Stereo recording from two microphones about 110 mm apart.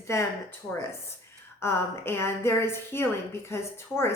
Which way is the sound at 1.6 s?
20° left (ahead or behind).